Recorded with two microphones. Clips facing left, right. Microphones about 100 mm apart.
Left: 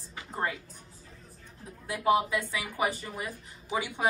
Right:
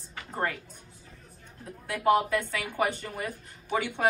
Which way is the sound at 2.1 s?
10° left (ahead or behind).